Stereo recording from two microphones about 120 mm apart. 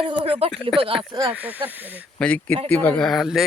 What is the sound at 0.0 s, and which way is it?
Speech, 45° right (ahead or behind).